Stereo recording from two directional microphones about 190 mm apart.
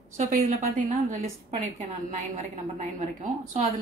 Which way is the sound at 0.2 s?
40° right (ahead or behind).